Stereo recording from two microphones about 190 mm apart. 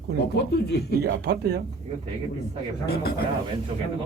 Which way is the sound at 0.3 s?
65° left (ahead or behind).